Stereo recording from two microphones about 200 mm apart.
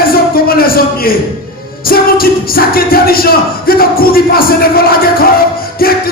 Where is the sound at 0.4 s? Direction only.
50° left (ahead or behind).